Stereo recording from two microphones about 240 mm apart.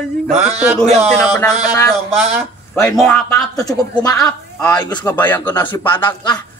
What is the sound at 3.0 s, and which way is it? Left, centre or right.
Speech, centre.